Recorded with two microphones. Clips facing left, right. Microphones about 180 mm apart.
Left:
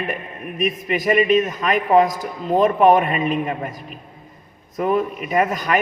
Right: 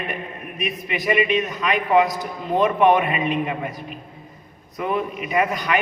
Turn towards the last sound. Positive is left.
turn(degrees=45)  # may be behind; listen again after turning